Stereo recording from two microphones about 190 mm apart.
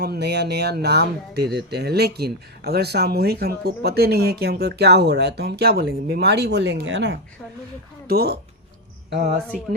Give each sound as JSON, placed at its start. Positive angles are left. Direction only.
{"t": 0.0, "sound": "speech", "side_deg": -60}
{"t": 8.0, "sound": "speech", "side_deg": -55}